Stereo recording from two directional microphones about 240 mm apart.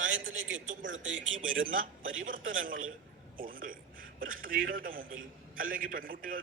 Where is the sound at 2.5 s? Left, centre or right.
Right.